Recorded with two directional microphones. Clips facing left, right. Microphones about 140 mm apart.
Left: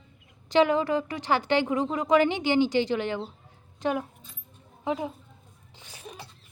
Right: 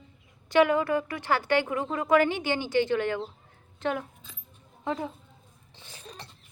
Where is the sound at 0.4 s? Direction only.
20° left (ahead or behind).